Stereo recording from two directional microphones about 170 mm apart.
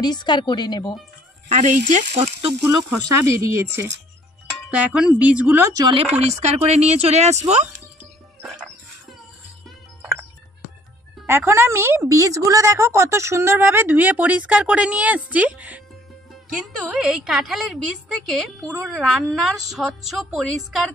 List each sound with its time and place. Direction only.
0.0 s a woman's voice: 25° left (ahead or behind)
1.5 s speech: 45° right (ahead or behind)
2.6 s speech: 15° right (ahead or behind)
5.9 s speech: 40° right (ahead or behind)
11.2 s speech: 15° right (ahead or behind)
16.8 s a woman's voice: centre (ahead or behind)